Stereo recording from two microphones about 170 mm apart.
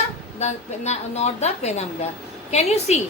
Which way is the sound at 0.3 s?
40° left (ahead or behind).